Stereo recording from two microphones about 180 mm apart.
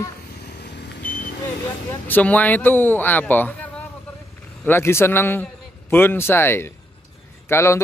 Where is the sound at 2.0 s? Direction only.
10° left (ahead or behind).